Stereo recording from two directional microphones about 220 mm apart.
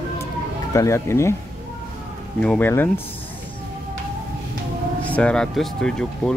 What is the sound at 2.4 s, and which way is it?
Speech, 5° left (ahead or behind).